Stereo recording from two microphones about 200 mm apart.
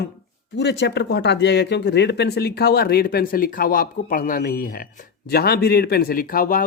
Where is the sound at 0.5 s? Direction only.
60° left (ahead or behind).